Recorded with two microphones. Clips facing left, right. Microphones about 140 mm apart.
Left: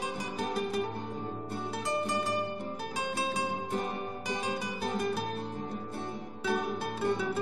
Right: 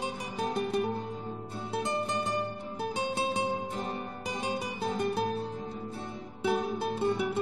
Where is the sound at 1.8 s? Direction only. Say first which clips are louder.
Right 1 dB; 25° right (ahead or behind).